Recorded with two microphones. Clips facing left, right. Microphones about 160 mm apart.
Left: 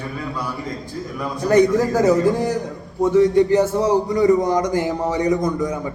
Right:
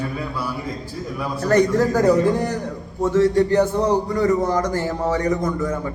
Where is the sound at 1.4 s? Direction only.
15° left (ahead or behind).